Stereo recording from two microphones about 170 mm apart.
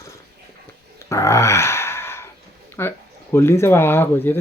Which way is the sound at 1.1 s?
20° left (ahead or behind).